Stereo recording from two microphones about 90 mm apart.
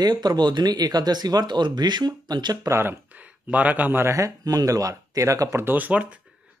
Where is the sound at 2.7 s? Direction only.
25° right (ahead or behind).